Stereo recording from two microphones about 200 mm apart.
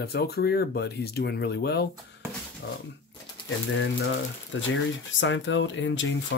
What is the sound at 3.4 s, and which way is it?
Speech, 65° left (ahead or behind).